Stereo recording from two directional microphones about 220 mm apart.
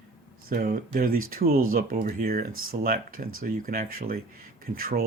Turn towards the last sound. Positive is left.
turn(degrees=-40)  # may be behind; listen again after turning